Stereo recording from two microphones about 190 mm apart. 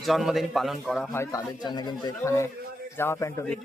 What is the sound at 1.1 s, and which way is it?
A man's voice, 15° left (ahead or behind).